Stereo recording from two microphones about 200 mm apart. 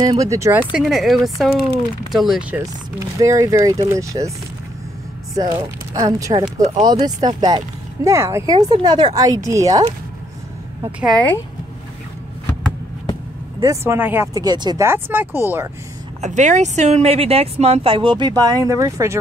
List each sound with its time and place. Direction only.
0.0 s speech: 15° right (ahead or behind); by 2.6 s centre (ahead or behind)
2.6 s speech: 15° right (ahead or behind)
5.3 s speech: 20° right (ahead or behind)
11.1 s speech: 5° left (ahead or behind)
13.6 s speech: 15° right (ahead or behind)
16.2 s speech: 35° right (ahead or behind); by 19.1 s 15° right (ahead or behind)